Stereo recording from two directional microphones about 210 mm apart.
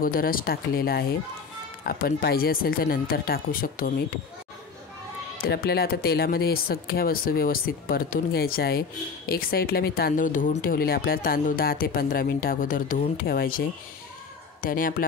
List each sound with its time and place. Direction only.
0.0 s speech: 45° left (ahead or behind)
5.4 s speech: 50° left (ahead or behind)